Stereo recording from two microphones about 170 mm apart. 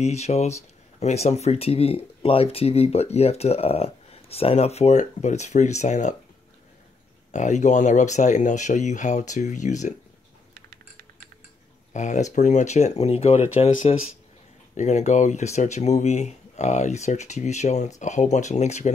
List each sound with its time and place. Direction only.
0.0 s speech: 40° left (ahead or behind)
7.2 s speech: 45° left (ahead or behind)
10.5 s typing: 60° right (ahead or behind)
11.9 s speech: 45° left (ahead or behind)